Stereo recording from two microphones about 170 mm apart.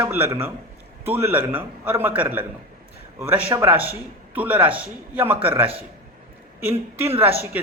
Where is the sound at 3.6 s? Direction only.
10° right (ahead or behind).